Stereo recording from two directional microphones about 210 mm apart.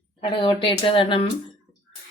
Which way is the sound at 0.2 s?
25° left (ahead or behind).